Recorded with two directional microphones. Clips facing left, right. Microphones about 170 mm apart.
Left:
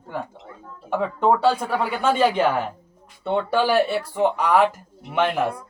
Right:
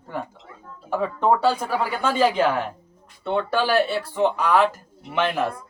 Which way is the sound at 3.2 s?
10° left (ahead or behind).